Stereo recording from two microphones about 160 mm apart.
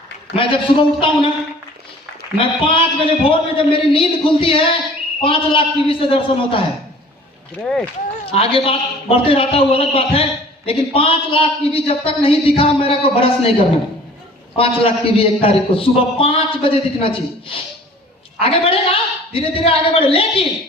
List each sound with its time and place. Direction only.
0.3 s a man's voice: 35° left (ahead or behind)
2.4 s a man's voice: 35° left (ahead or behind)
7.6 s speech: 5° left (ahead or behind)
8.3 s a man's voice: 35° left (ahead or behind)
14.5 s a man's voice: 35° left (ahead or behind)